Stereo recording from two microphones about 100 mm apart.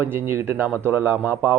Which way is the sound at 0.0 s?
25° right (ahead or behind).